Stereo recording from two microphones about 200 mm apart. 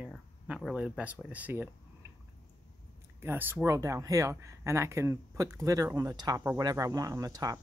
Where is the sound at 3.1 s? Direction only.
10° right (ahead or behind).